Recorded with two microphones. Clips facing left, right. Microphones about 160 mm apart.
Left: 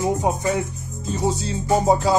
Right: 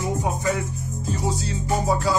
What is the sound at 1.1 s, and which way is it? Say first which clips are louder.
Speech: left 4 dB; 25° left (ahead or behind).